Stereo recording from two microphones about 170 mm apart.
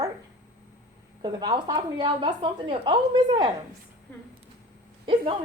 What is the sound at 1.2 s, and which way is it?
A woman's voice, 25° right (ahead or behind).